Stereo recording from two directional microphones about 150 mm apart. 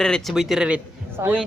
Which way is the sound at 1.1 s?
15° right (ahead or behind).